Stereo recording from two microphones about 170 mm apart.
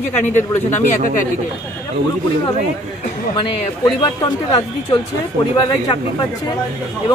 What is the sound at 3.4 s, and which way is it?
Speech, 25° left (ahead or behind).